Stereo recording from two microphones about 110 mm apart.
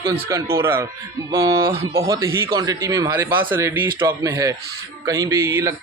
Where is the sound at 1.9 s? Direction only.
25° right (ahead or behind).